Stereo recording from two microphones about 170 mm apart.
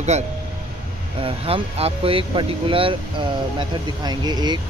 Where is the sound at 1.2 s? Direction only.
35° right (ahead or behind).